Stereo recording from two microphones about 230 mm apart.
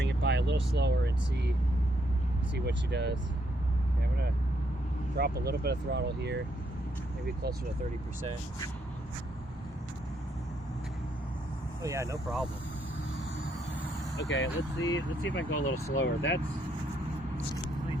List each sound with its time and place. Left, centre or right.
0.0 s vehicle: right
2.6 s speech: right
5.1 s speech: right
11.8 s speech: centre
14.2 s speech: left